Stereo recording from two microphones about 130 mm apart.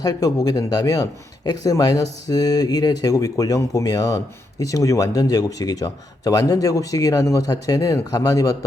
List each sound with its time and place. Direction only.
0.0 s speech: 25° left (ahead or behind)